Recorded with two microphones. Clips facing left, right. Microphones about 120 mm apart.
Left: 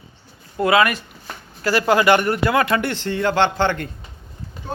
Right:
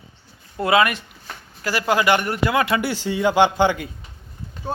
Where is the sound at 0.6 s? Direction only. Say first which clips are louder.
Left 1 dB; 25° right (ahead or behind).